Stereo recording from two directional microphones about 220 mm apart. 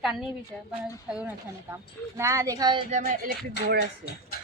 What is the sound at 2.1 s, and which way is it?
Speech, 15° right (ahead or behind).